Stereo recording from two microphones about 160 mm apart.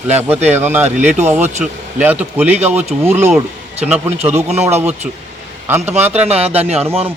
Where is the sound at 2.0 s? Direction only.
10° right (ahead or behind).